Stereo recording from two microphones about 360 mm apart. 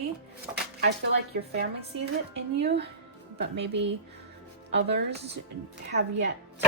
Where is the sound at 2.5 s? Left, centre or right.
Right.